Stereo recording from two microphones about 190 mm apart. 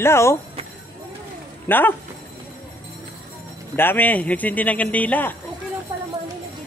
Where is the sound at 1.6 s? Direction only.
10° left (ahead or behind).